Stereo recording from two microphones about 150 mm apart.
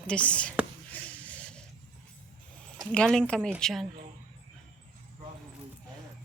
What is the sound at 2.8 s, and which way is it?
Speech, 5° left (ahead or behind).